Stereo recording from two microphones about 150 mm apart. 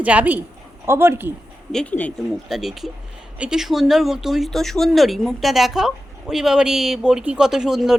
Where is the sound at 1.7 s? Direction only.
5° left (ahead or behind).